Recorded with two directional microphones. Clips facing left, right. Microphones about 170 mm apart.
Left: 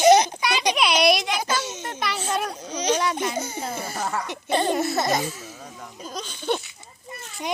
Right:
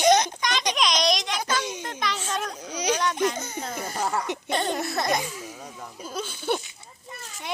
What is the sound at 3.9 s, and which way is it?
Speech, 10° right (ahead or behind).